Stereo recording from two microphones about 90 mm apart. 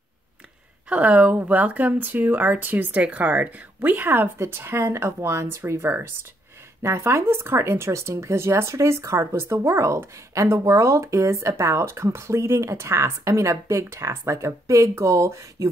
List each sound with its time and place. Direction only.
0.8 s speech: 15° right (ahead or behind); by 15.7 s 35° right (ahead or behind)